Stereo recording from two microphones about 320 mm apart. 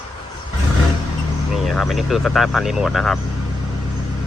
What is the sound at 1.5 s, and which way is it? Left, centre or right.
Speech, centre.